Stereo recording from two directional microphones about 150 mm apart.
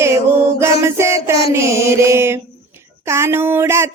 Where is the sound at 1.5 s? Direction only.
20° right (ahead or behind).